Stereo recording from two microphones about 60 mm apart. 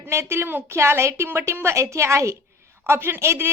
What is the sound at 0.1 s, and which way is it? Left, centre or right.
A woman's voice, right.